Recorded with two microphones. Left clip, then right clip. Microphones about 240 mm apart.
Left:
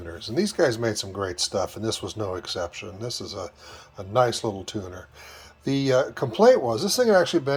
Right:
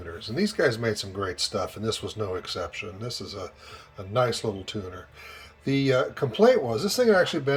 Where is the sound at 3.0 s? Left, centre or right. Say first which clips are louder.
Left 3 dB; left.